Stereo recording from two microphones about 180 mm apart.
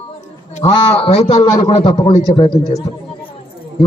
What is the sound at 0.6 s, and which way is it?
A man's voice, 25° left (ahead or behind).